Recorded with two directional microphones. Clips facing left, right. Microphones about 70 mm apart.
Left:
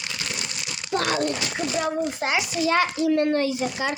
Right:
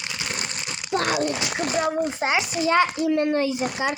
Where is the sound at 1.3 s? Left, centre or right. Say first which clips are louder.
Right 1 dB; centre.